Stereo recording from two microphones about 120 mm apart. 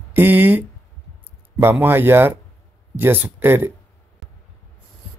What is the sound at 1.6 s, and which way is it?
Speech, 20° right (ahead or behind).